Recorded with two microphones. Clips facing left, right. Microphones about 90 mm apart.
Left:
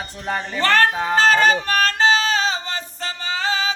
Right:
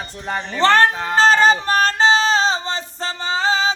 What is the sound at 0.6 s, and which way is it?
Speech, 30° right (ahead or behind).